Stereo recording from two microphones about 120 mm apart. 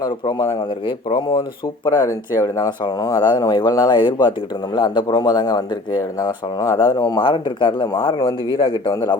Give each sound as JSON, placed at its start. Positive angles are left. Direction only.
{"t": 0.0, "sound": "speech", "side_deg": 35}